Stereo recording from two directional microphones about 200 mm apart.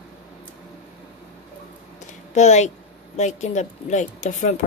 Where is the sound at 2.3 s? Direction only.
35° left (ahead or behind).